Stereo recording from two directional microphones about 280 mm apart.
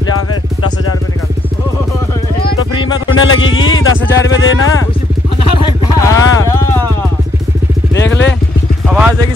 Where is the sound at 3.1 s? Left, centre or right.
Left.